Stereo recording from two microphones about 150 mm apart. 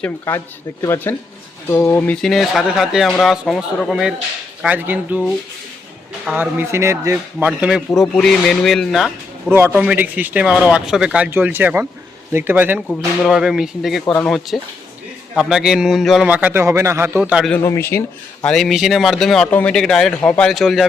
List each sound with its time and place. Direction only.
0.0 s a man's voice: 15° left (ahead or behind); by 5.2 s 10° right (ahead or behind)
6.2 s a man's voice: 10° right (ahead or behind)
8.0 s a man's voice: 5° left (ahead or behind)
9.5 s a man's voice: 15° right (ahead or behind)
12.9 s a man's voice: centre (ahead or behind)
14.0 s speech: 10° left (ahead or behind)
14.3 s a man's voice: centre (ahead or behind)
17.6 s speech: 20° left (ahead or behind)
18.4 s a man's voice: 5° left (ahead or behind)